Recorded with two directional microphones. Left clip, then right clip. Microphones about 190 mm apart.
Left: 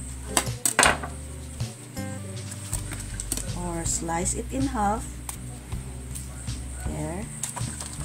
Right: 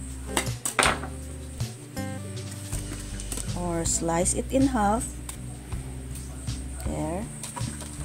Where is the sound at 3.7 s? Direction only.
35° right (ahead or behind).